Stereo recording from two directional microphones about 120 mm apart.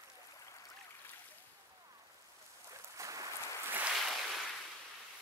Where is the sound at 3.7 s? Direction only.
10° right (ahead or behind).